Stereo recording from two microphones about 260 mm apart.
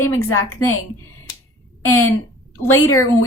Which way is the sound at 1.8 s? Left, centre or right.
Left.